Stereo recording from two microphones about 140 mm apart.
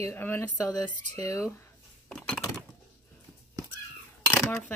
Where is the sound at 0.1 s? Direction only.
15° left (ahead or behind).